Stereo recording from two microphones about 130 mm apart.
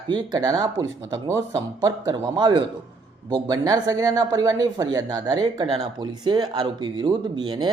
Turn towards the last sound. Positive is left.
turn(degrees=-30)  # may be behind; listen again after turning